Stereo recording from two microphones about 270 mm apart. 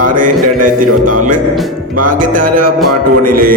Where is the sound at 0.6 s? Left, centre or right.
Right.